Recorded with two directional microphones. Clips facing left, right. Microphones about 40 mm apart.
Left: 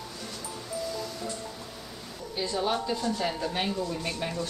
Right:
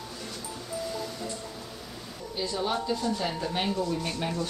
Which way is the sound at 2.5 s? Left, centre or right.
Centre.